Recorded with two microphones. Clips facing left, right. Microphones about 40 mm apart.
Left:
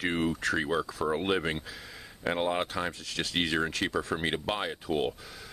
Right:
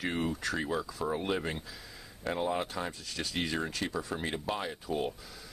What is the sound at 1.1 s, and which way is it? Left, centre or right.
Speech, left.